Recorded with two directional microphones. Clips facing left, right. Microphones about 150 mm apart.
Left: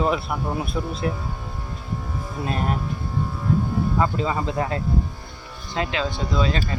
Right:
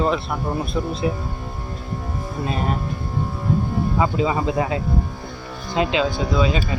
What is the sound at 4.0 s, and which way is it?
Speech, 10° right (ahead or behind).